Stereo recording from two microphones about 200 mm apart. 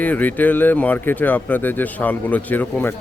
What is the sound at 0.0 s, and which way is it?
Speech, 10° left (ahead or behind).